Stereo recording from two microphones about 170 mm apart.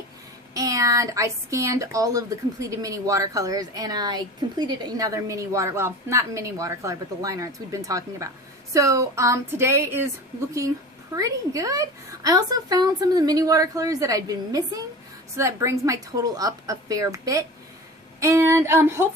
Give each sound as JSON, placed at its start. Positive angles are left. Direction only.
{"t": 0.5, "sound": "a woman's voice", "side_deg": -20}
{"t": 11.1, "sound": "a woman's voice", "side_deg": -20}